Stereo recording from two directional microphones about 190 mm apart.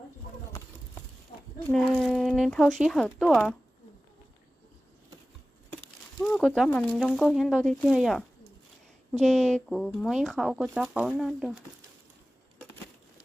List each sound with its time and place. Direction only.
1.7 s speech: centre (ahead or behind)
6.2 s speech: centre (ahead or behind)
9.2 s speech: 5° left (ahead or behind)